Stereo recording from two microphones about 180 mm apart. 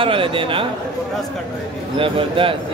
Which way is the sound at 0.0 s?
30° right (ahead or behind).